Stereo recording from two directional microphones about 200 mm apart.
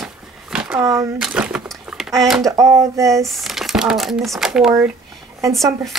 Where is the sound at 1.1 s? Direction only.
5° right (ahead or behind).